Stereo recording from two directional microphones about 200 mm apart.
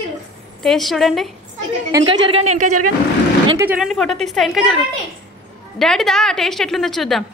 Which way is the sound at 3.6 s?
5° right (ahead or behind).